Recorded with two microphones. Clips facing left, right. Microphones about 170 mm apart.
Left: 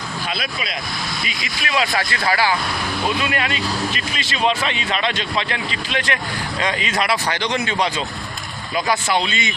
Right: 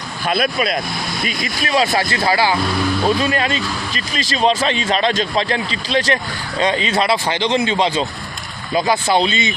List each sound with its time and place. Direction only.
0.3 s speech: 50° right (ahead or behind); by 9.5 s 30° right (ahead or behind)